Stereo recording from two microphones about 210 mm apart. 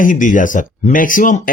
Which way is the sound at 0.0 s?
40° left (ahead or behind).